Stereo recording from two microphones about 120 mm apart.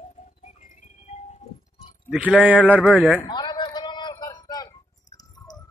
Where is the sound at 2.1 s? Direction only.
10° right (ahead or behind).